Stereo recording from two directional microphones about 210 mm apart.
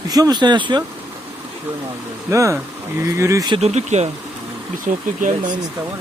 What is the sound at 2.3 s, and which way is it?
Speech, 15° right (ahead or behind).